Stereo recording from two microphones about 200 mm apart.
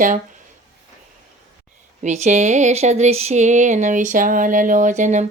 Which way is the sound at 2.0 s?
35° right (ahead or behind).